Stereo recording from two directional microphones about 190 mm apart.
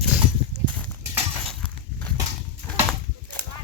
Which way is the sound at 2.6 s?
10° left (ahead or behind).